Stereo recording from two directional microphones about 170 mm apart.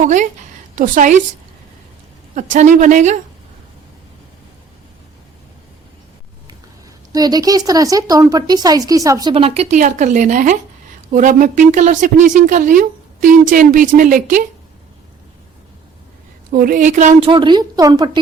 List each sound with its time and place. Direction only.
0.0 s speech: 45° right (ahead or behind)
2.3 s speech: 45° right (ahead or behind)
7.1 s speech: 20° right (ahead or behind)
9.3 s speech: 35° right (ahead or behind)
16.5 s speech: 55° right (ahead or behind)
17.2 s speech: 30° right (ahead or behind)